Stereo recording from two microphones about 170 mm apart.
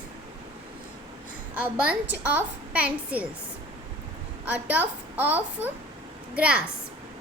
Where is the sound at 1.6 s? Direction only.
10° right (ahead or behind).